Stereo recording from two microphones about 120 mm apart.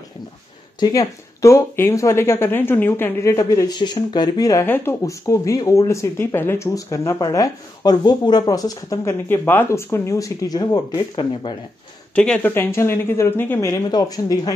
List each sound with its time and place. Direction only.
0.7 s speech: 30° left (ahead or behind)
4.6 s speech: 20° left (ahead or behind); by 11.5 s 40° left (ahead or behind)
12.2 s speech: 10° left (ahead or behind); by 14.5 s 30° left (ahead or behind)